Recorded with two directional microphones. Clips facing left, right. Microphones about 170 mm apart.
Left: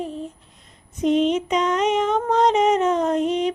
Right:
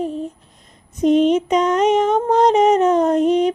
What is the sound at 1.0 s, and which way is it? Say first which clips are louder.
Female singing: right 5 dB; 45° right (ahead or behind).